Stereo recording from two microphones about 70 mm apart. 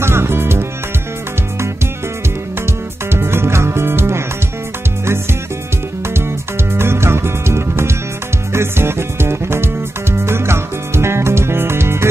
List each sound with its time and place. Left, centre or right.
0.0 s music: right
3.1 s music: right
6.7 s music: right